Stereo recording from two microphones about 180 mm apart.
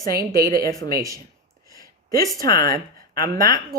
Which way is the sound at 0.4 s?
20° left (ahead or behind).